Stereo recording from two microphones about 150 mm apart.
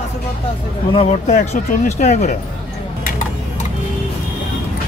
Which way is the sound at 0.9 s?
50° left (ahead or behind).